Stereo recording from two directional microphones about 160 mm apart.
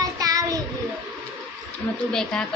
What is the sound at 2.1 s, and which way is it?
Speech, 5° left (ahead or behind).